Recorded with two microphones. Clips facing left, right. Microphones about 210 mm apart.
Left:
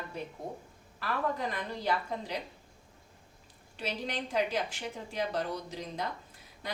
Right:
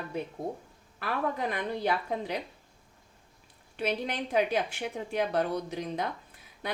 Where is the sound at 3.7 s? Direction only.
60° right (ahead or behind).